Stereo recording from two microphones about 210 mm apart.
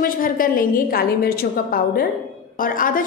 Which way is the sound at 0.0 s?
40° left (ahead or behind).